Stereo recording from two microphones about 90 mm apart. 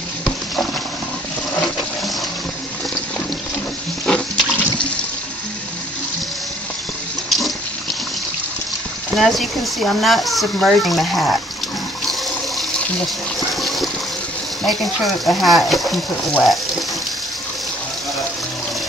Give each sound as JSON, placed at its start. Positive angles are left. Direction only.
{"t": 4.0, "sound": "toilet flush", "side_deg": 10}
{"t": 7.2, "sound": "water", "side_deg": 0}
{"t": 9.1, "sound": "speech", "side_deg": 0}
{"t": 13.6, "sound": "a sound", "side_deg": 0}
{"t": 14.7, "sound": "speech", "side_deg": 0}